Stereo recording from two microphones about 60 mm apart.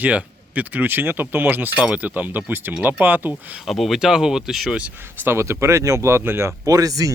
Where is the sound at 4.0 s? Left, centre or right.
Centre.